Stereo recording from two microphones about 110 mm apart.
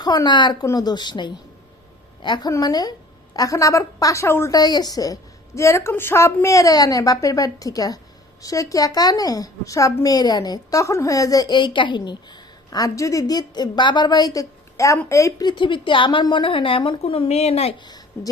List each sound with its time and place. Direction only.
0.0 s a woman's voice: 40° left (ahead or behind)
4.5 s a woman's voice: 35° left (ahead or behind)
15.4 s a woman's voice: 50° left (ahead or behind); by 17.7 s 70° left (ahead or behind)
17.8 s a sound: 35° left (ahead or behind)